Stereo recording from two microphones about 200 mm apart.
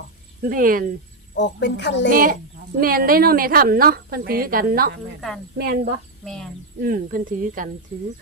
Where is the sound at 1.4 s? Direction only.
60° left (ahead or behind).